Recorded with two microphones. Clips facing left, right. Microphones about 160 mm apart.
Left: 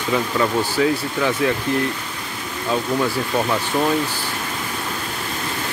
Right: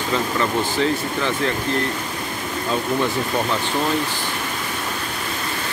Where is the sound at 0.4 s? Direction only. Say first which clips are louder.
Left 3 dB; 10° left (ahead or behind).